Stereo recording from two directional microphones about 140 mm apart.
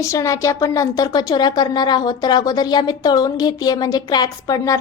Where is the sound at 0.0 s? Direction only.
25° left (ahead or behind).